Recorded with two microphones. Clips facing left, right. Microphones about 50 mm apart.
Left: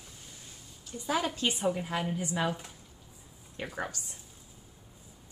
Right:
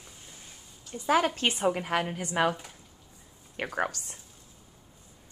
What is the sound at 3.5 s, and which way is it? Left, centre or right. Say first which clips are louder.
Speech: right 6 dB; right.